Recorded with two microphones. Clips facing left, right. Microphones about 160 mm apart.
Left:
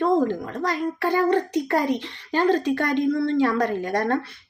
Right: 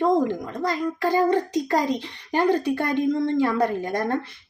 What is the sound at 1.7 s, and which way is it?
Speech, 65° left (ahead or behind).